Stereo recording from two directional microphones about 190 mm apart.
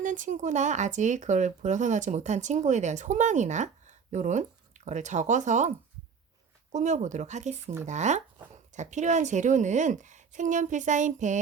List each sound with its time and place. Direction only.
0.0 s speech: 40° right (ahead or behind)